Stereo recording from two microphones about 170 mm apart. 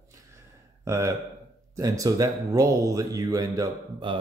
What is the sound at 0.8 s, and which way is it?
Speech, 15° right (ahead or behind).